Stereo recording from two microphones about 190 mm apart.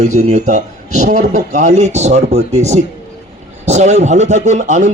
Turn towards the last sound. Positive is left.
turn(degrees=-40)  # may be behind; listen again after turning